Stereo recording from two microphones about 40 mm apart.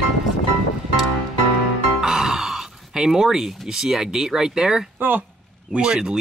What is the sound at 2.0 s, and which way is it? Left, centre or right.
Speech, centre.